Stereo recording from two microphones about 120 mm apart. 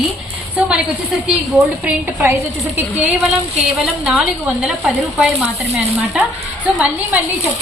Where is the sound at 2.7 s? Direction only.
15° right (ahead or behind).